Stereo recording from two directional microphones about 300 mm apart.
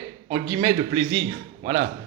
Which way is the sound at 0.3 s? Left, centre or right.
Centre.